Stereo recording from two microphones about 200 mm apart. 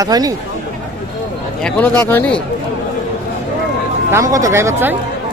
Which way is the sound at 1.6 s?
10° left (ahead or behind).